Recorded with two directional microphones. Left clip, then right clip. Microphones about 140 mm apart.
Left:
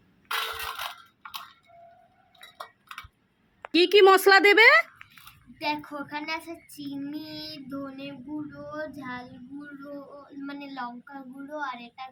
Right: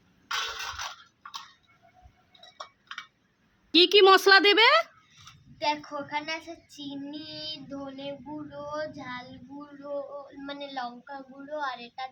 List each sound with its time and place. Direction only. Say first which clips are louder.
0.3 s a sound: left 1 dB; 15° left (ahead or behind)
3.7 s a woman's voice: even; 10° left (ahead or behind)
5.5 s speech: right 1 dB; 20° right (ahead or behind)
8.7 s child singing: right 2 dB; 20° right (ahead or behind)
10.4 s speech: even; 25° right (ahead or behind)